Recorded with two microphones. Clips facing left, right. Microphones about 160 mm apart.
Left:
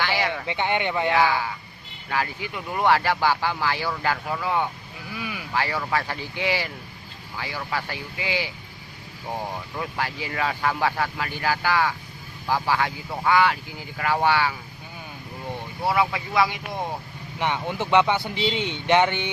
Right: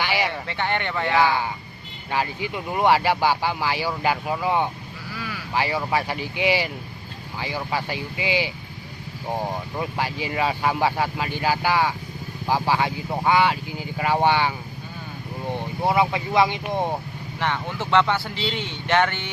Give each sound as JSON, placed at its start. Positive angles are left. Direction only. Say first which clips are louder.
{"t": 0.0, "sound": "a sound", "louder": "right 1 dB", "side_deg": -15}
{"t": 0.4, "sound": "speech", "louder": "left 1 dB", "side_deg": 15}
{"t": 1.1, "sound": "speech", "louder": "right 4 dB", "side_deg": -20}
{"t": 5.1, "sound": "vehicle", "louder": "left 1 dB", "side_deg": 20}
{"t": 5.5, "sound": "speech", "louder": "right 2 dB", "side_deg": -15}
{"t": 9.7, "sound": "speech", "louder": "even", "side_deg": -20}
{"t": 15.8, "sound": "speech", "louder": "right 2 dB", "side_deg": -20}
{"t": 17.4, "sound": "speech", "louder": "left 1 dB", "side_deg": 15}